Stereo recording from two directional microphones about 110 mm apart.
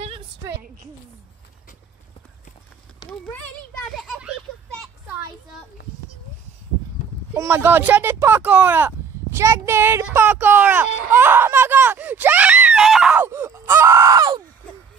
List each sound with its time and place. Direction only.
3.1 s a sound: 15° left (ahead or behind)
3.8 s children playing: centre (ahead or behind)
7.3 s speech: 25° right (ahead or behind); by 13.1 s 5° right (ahead or behind)
13.1 s groan: 20° right (ahead or behind)